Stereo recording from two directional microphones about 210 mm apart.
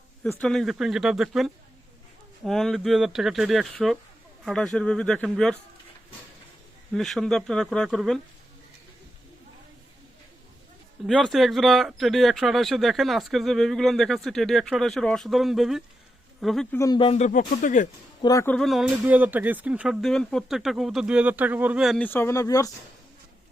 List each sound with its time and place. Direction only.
0.2 s speech: 5° left (ahead or behind)
6.9 s speech: centre (ahead or behind)
11.0 s speech: centre (ahead or behind)
16.7 s speech: 15° left (ahead or behind); by 17.8 s 40° left (ahead or behind)
18.2 s speech: 15° left (ahead or behind)
18.5 s speech: centre (ahead or behind); by 22.7 s 15° left (ahead or behind)